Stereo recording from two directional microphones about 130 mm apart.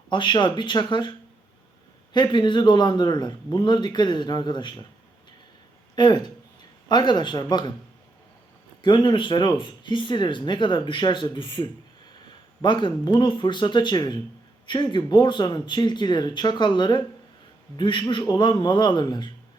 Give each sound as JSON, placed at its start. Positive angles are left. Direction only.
{"t": 0.1, "sound": "speech", "side_deg": 35}
{"t": 2.1, "sound": "speech", "side_deg": 35}
{"t": 6.0, "sound": "speech", "side_deg": 35}
{"t": 8.8, "sound": "speech", "side_deg": 35}